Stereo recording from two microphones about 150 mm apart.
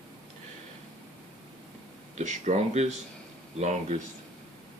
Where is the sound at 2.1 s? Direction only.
55° right (ahead or behind).